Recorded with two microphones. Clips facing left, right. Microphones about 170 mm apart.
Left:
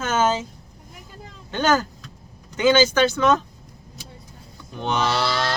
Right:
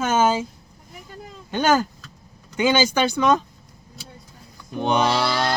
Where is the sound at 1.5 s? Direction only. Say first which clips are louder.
Right 1 dB; 10° right (ahead or behind).